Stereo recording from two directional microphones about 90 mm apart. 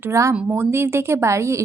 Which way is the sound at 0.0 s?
35° right (ahead or behind).